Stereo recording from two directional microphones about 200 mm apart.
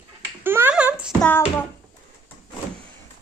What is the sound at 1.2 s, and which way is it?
Babbling, 10° left (ahead or behind).